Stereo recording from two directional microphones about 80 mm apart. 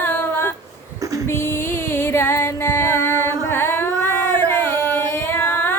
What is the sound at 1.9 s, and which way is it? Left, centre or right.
Music, left.